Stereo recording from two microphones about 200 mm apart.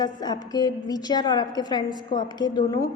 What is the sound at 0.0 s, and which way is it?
A woman's voice, 20° left (ahead or behind).